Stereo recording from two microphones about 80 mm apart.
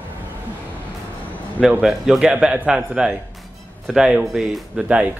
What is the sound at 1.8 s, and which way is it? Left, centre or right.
Speech, centre.